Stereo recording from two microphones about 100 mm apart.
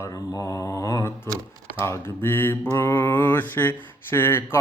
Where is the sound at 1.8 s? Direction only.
25° left (ahead or behind).